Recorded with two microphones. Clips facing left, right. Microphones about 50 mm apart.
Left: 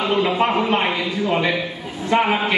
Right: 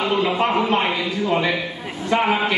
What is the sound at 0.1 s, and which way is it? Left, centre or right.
Speech, centre.